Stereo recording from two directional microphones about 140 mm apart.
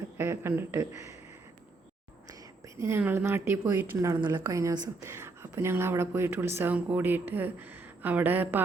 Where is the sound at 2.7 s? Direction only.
20° right (ahead or behind).